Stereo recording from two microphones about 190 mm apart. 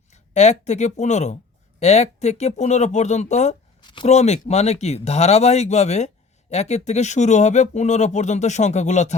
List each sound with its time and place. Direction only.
0.1 s speech: 35° left (ahead or behind)
3.8 s speech: 25° left (ahead or behind)
4.0 s speech: 35° left (ahead or behind)